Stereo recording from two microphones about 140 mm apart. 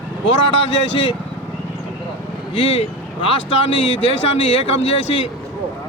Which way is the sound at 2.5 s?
45° left (ahead or behind).